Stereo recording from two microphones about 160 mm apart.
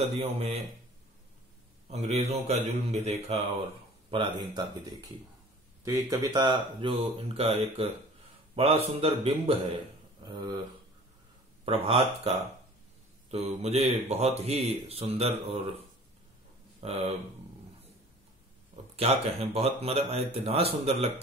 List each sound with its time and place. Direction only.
0.0 s speech: 40° right (ahead or behind)
1.9 s speech: 40° right (ahead or behind)
11.6 s speech: 35° right (ahead or behind)
13.3 s speech: 40° right (ahead or behind)
18.9 s speech: 40° right (ahead or behind)